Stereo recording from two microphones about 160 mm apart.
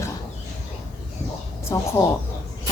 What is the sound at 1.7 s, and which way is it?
Speech, 20° left (ahead or behind).